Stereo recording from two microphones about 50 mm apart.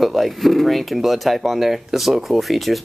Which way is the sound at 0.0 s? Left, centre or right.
Centre.